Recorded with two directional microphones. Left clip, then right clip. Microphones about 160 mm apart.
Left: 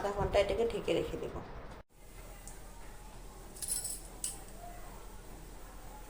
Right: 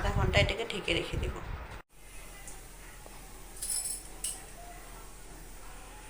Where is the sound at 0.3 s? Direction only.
50° left (ahead or behind).